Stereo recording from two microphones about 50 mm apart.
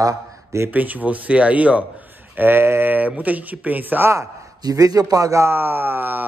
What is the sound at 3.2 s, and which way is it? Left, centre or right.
Speech, right.